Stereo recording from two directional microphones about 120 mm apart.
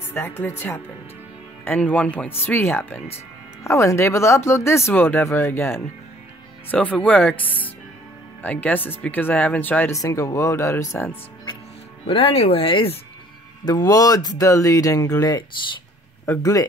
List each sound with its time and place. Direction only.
0.1 s speech: 20° left (ahead or behind)
9.9 s speech: 25° left (ahead or behind)
12.1 s speech: 55° left (ahead or behind)
13.7 s speech: 35° left (ahead or behind)